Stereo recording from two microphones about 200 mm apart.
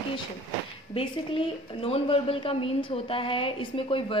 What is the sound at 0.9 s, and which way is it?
A woman's voice, 25° left (ahead or behind).